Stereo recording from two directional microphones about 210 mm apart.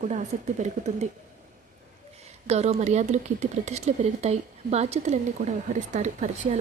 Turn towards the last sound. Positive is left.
turn(degrees=-35)  # may be behind; listen again after turning